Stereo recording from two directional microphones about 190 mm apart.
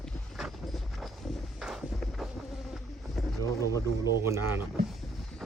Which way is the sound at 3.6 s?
15° left (ahead or behind).